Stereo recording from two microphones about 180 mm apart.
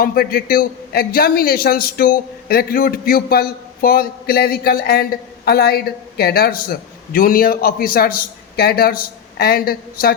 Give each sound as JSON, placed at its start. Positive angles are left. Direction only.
{"t": 0.0, "sound": "a man's voice", "side_deg": 55}